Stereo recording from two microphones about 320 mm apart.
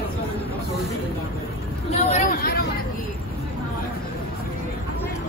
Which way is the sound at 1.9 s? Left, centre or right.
Left.